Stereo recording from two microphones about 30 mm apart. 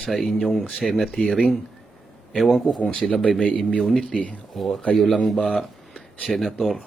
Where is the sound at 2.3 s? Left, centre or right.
Centre.